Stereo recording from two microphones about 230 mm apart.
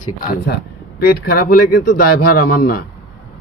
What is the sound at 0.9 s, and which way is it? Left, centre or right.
Speech, left.